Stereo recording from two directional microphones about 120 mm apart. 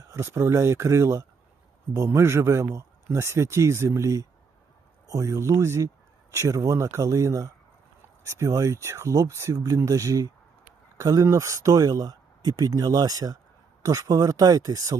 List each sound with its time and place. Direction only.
0.1 s a man's voice: 20° right (ahead or behind)